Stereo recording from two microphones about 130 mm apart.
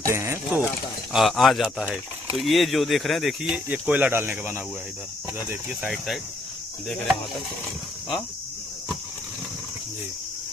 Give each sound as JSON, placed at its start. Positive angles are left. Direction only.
{"t": 0.0, "sound": "speech", "side_deg": -20}
{"t": 1.1, "sound": "speech", "side_deg": 0}
{"t": 3.4, "sound": "speech", "side_deg": -10}
{"t": 6.9, "sound": "speech", "side_deg": 0}